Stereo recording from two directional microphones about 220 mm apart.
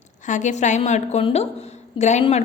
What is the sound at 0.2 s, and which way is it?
A woman's voice, 35° left (ahead or behind).